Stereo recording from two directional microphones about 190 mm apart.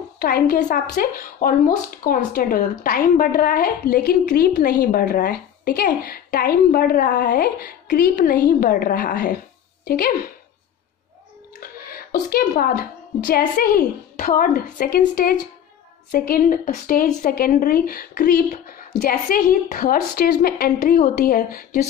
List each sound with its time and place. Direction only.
0.2 s a woman's voice: 50° left (ahead or behind)
11.8 s a woman's voice: 50° left (ahead or behind)